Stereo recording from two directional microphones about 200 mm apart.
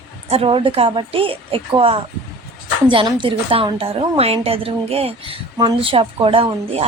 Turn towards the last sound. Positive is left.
turn(degrees=-25)  # may be behind; listen again after turning